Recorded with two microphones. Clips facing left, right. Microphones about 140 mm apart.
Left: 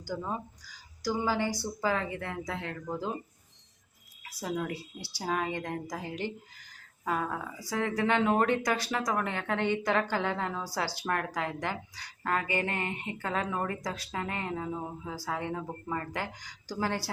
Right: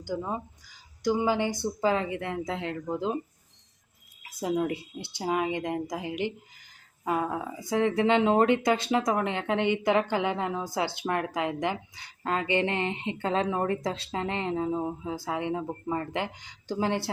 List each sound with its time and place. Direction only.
0.0 s speech: 15° right (ahead or behind)
4.3 s a woman's voice: 20° right (ahead or behind)